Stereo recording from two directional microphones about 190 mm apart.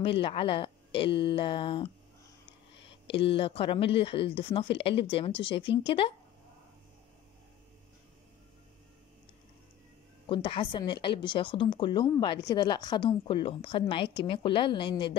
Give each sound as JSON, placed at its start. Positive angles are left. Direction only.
{"t": 0.0, "sound": "a woman's voice", "side_deg": 30}
{"t": 2.9, "sound": "a woman's voice", "side_deg": 30}
{"t": 10.2, "sound": "a woman's voice", "side_deg": 25}